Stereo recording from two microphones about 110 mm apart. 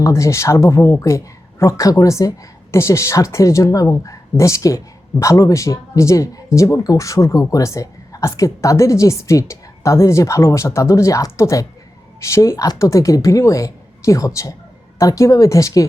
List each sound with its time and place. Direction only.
0.0 s speech: 30° left (ahead or behind)